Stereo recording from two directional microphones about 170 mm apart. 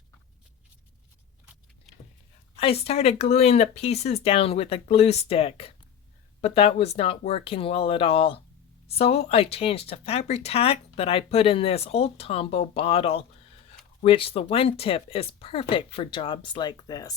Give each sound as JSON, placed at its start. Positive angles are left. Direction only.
{"t": 2.6, "sound": "speech", "side_deg": 35}